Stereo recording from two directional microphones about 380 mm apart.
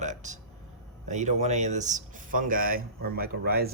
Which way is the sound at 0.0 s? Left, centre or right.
Centre.